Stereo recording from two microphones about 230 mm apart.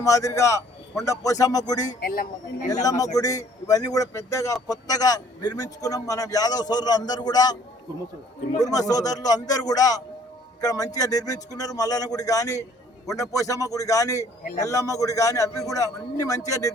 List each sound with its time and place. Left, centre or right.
0.0 s a man's voice: centre
2.0 s a man's voice: left
2.8 s a man's voice: centre
8.6 s a man's voice: centre